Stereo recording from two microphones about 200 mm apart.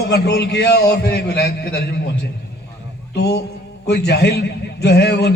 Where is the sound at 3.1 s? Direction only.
55° left (ahead or behind).